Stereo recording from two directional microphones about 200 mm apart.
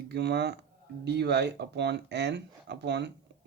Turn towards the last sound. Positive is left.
turn(degrees=-60)  # may be behind; listen again after turning